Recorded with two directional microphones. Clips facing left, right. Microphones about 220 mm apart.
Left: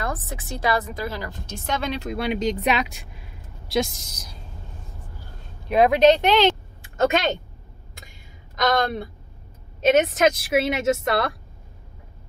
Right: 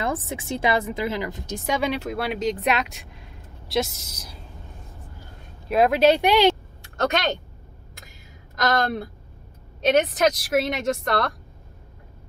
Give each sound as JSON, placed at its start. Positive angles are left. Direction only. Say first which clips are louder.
{"t": 0.0, "sound": "a woman's voice", "louder": "right 3 dB", "side_deg": -25}
{"t": 5.7, "sound": "speech", "louder": "left 2 dB", "side_deg": 0}
{"t": 6.8, "sound": "a sound", "louder": "left 6 dB", "side_deg": 5}
{"t": 8.5, "sound": "a woman's voice", "louder": "left 1 dB", "side_deg": 0}